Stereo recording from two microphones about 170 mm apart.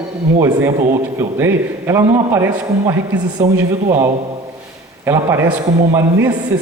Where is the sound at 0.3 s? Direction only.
20° right (ahead or behind).